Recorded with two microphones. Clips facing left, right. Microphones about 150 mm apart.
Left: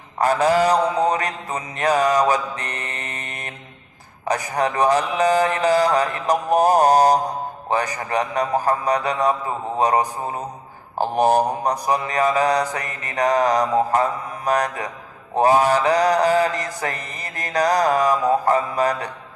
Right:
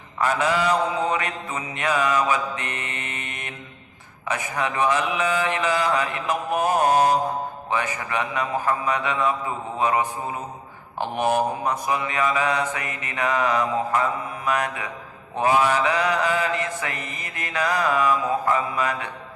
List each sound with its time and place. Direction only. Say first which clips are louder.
0.2 s mantra: left 5 dB; 40° left (ahead or behind)